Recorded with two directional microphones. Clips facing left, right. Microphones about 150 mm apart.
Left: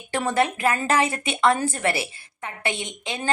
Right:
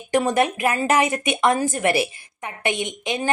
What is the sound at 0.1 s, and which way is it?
A woman's voice, 15° right (ahead or behind).